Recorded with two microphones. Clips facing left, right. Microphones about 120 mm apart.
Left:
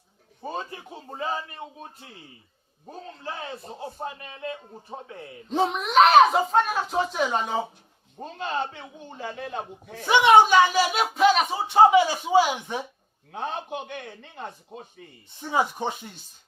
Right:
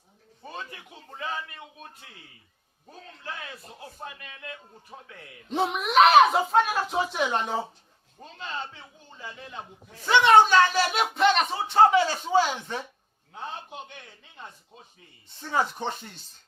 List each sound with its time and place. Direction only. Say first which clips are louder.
0.4 s a man's voice: left 6 dB; 30° left (ahead or behind)
5.5 s speech: left 2 dB; centre (ahead or behind)
8.2 s a man's voice: left 7 dB; 50° left (ahead or behind)
10.1 s speech: left 2 dB; 15° left (ahead or behind)
13.3 s a man's voice: left 7 dB; 70° left (ahead or behind)
15.3 s speech: left 2 dB; 15° left (ahead or behind)